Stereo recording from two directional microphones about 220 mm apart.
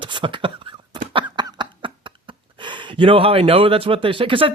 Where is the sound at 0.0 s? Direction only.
20° right (ahead or behind).